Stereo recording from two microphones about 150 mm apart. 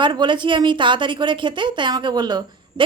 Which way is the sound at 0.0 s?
30° right (ahead or behind).